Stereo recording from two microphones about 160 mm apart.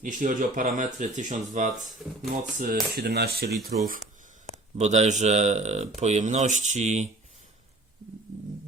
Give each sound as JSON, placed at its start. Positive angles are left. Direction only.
{"t": 0.0, "sound": "speech", "side_deg": -55}
{"t": 2.9, "sound": "speech", "side_deg": -90}
{"t": 4.8, "sound": "speech", "side_deg": -45}